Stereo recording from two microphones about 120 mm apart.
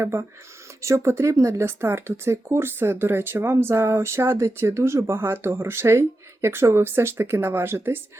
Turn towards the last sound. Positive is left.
turn(degrees=-20)  # may be behind; listen again after turning